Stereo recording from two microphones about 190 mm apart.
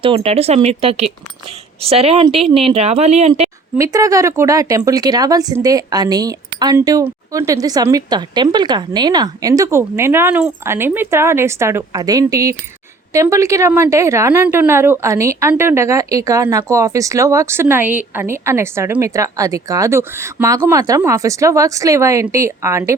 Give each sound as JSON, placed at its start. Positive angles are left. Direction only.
{"t": 0.0, "sound": "speech", "side_deg": -30}
{"t": 3.8, "sound": "speech", "side_deg": -15}